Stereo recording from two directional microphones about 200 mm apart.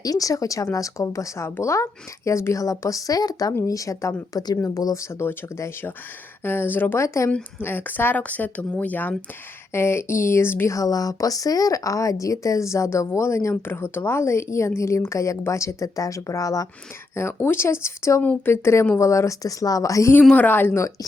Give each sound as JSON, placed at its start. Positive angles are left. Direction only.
{"t": 0.0, "sound": "speech", "side_deg": 15}